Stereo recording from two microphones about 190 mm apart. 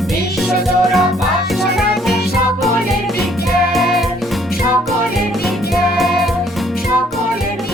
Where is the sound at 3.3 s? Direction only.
55° left (ahead or behind).